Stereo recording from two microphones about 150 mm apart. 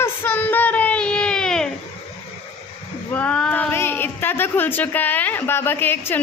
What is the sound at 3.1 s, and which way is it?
Speech, 10° left (ahead or behind).